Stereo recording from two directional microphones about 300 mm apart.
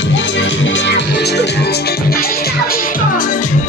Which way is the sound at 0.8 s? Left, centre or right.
Left.